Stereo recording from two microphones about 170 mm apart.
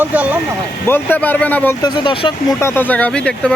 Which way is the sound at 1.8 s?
30° left (ahead or behind).